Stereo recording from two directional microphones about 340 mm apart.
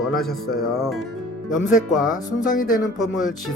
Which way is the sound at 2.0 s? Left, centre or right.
Left.